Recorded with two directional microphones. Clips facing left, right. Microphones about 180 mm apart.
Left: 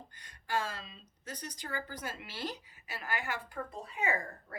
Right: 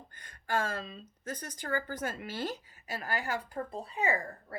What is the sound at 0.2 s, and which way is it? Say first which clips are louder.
Speech: right 3 dB; 50° right (ahead or behind).